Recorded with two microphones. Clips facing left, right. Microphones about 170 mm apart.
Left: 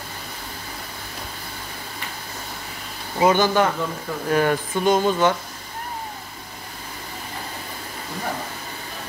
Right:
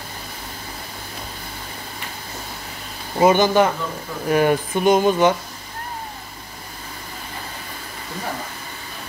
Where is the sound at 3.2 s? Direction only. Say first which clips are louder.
Right 3 dB; 20° right (ahead or behind).